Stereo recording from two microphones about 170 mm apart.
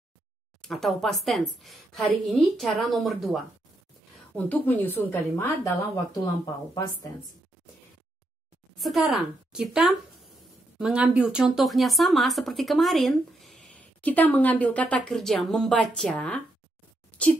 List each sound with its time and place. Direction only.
0.6 s speech: centre (ahead or behind)
4.5 s a woman's voice: 10° left (ahead or behind)
8.7 s speech: centre (ahead or behind)